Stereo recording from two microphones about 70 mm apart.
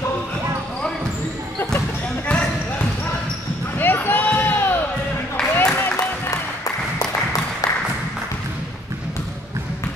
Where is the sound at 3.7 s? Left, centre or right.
Left.